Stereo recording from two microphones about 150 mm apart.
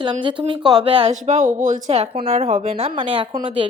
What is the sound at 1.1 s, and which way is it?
Speech, 55° right (ahead or behind).